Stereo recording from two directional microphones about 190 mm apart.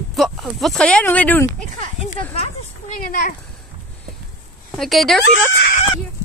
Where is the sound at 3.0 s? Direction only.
45° left (ahead or behind).